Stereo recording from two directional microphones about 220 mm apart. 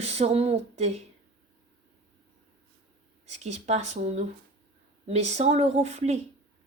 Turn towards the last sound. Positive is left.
turn(degrees=-30)  # may be behind; listen again after turning